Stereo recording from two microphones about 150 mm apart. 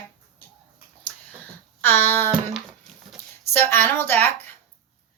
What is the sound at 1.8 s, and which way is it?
Speech, 15° left (ahead or behind).